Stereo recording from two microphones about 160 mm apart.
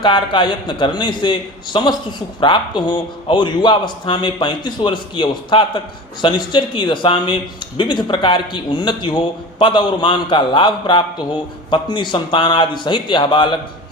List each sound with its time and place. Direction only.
0.0 s a man's voice: 30° left (ahead or behind)